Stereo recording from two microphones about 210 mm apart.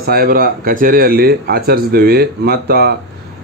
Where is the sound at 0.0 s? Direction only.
45° right (ahead or behind).